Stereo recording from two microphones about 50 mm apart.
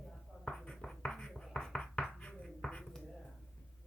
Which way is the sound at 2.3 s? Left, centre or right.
Centre.